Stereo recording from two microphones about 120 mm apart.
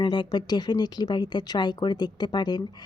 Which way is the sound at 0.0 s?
40° left (ahead or behind).